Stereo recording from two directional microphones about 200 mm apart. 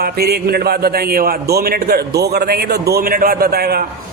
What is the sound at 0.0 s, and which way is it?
A man's voice, 50° right (ahead or behind).